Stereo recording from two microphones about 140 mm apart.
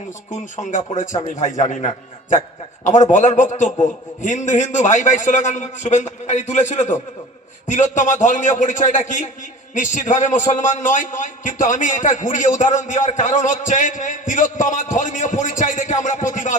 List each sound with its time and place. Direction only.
0.3 s a man's voice: 65° left (ahead or behind)